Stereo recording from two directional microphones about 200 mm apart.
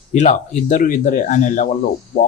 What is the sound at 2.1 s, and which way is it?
Speech, 50° left (ahead or behind).